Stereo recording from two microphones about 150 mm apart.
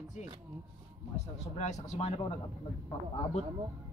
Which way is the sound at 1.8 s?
45° left (ahead or behind).